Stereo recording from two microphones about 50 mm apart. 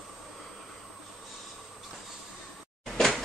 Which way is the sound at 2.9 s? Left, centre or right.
Centre.